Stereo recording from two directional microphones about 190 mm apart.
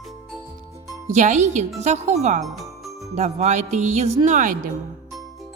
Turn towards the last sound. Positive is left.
turn(degrees=-45)  # may be behind; listen again after turning